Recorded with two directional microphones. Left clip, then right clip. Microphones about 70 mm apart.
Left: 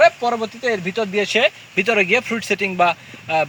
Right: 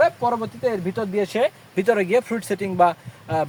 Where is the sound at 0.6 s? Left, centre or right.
Right.